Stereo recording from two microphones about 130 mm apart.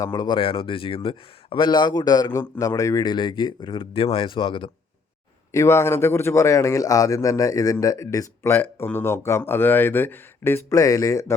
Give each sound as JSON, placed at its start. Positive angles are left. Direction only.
{"t": 0.0, "sound": "speech", "side_deg": 35}
{"t": 5.5, "sound": "a man's voice", "side_deg": 20}
{"t": 8.5, "sound": "a man's voice", "side_deg": 15}